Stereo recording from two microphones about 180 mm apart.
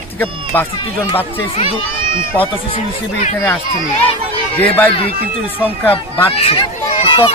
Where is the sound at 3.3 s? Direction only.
10° left (ahead or behind).